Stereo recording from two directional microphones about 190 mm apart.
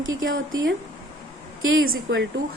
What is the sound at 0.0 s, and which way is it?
Speech, 90° right.